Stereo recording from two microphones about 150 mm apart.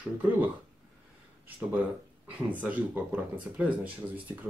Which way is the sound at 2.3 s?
10° right (ahead or behind).